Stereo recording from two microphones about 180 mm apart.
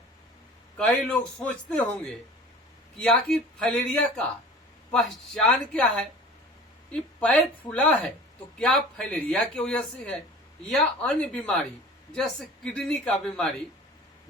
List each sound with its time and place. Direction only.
0.8 s a man's voice: 5° left (ahead or behind)
12.7 s speech: 5° left (ahead or behind)